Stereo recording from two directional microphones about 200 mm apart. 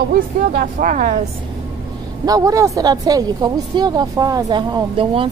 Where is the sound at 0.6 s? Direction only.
40° right (ahead or behind).